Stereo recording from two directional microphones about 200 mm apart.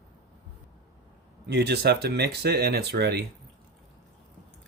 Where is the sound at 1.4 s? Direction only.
55° right (ahead or behind).